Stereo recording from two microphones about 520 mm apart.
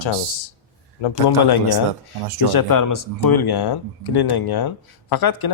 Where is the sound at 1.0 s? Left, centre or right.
Left.